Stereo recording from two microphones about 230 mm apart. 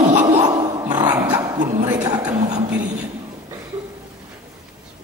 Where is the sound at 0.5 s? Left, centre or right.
Centre.